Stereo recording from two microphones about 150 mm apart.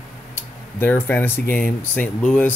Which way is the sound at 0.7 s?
15° left (ahead or behind).